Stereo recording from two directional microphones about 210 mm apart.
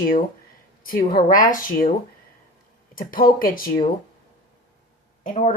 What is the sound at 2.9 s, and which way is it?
Speech, 45° left (ahead or behind).